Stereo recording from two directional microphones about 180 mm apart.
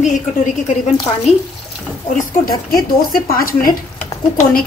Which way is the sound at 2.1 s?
55° left (ahead or behind).